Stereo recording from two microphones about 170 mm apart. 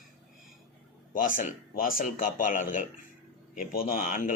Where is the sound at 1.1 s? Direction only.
55° left (ahead or behind).